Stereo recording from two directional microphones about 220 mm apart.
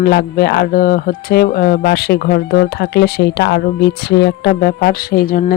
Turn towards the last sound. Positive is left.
turn(degrees=40)  # may be behind; listen again after turning